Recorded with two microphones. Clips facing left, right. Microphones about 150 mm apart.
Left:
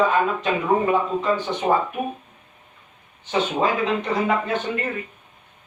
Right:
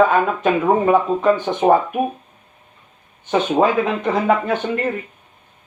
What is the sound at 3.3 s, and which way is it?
Speech, 50° right (ahead or behind).